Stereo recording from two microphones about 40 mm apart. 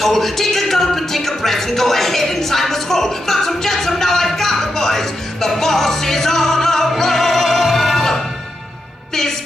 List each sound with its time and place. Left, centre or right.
0.0 s music: centre